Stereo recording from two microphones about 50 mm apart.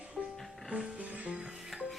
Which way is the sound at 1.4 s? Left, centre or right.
Centre.